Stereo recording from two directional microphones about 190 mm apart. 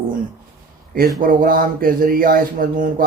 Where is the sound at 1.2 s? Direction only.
45° right (ahead or behind).